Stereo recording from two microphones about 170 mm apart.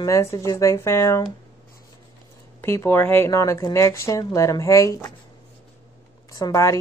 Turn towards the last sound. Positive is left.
turn(degrees=20)  # may be behind; listen again after turning